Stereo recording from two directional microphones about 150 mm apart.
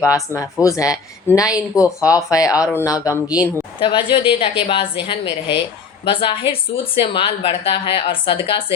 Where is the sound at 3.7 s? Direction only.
35° left (ahead or behind).